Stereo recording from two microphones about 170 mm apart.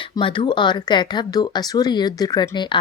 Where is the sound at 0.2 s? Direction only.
30° left (ahead or behind).